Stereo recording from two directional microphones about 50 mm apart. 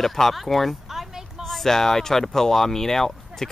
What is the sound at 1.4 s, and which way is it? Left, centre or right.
Speech, centre.